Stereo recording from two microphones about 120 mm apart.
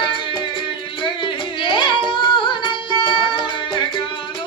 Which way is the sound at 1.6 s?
45° left (ahead or behind).